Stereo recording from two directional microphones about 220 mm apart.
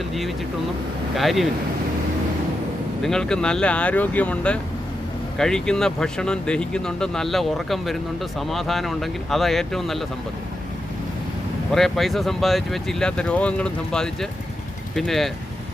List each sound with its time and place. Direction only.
1.1 s speech: centre (ahead or behind)
3.0 s speech: centre (ahead or behind)
11.7 s speech: centre (ahead or behind)